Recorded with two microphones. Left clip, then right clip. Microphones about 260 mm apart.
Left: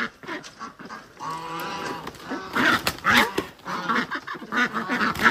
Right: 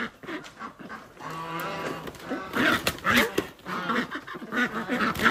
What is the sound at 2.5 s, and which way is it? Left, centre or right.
Dog, centre.